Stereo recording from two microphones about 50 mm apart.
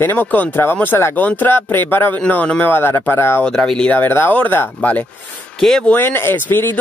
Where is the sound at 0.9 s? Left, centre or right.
Left.